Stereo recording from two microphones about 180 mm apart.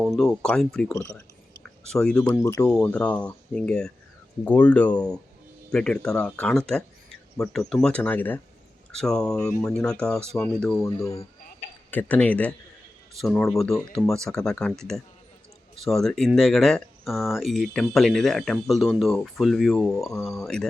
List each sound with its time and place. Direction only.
0.0 s speech: centre (ahead or behind)
0.9 s speech: 15° left (ahead or behind)
1.8 s speech: 5° left (ahead or behind)
2.4 s speech: 15° left (ahead or behind)
10.8 s speech: 15° left (ahead or behind)
15.8 s speech: centre (ahead or behind)